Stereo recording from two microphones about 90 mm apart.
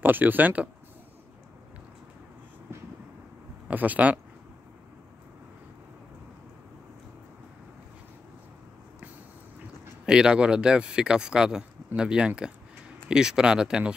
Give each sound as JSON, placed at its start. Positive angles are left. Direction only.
{"t": 0.0, "sound": "speech", "side_deg": -20}
{"t": 3.6, "sound": "speech", "side_deg": -20}
{"t": 10.0, "sound": "speech", "side_deg": -10}